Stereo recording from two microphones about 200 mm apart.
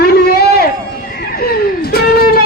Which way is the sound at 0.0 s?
50° left (ahead or behind).